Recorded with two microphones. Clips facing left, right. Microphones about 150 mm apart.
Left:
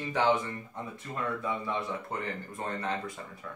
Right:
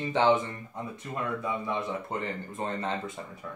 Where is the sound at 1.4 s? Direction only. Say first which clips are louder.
Right 2 dB; 20° right (ahead or behind).